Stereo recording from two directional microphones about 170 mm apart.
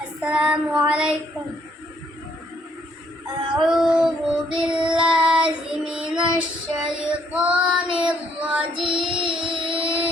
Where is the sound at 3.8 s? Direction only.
5° right (ahead or behind).